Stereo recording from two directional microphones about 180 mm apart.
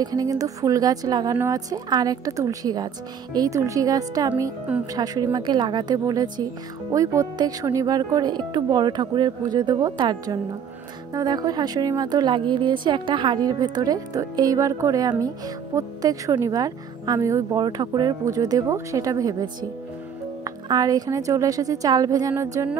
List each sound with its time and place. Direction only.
0.0 s a woman's voice: 20° right (ahead or behind)